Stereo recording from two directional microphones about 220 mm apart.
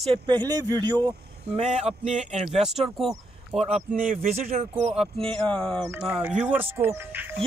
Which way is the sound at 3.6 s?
30° right (ahead or behind).